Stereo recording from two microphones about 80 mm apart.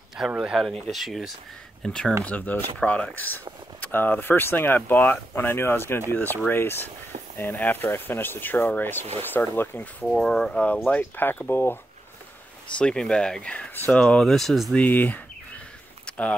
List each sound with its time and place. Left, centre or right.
0.4 s speech: centre
1.8 s speech: centre
2.2 s speech: centre
10.1 s speech: centre
10.8 s speech: left
12.7 s speech: centre
14.0 s speech: centre
14.8 s speech: left
16.1 s a sound: centre